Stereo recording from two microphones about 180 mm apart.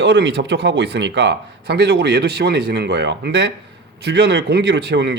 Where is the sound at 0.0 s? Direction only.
70° right (ahead or behind).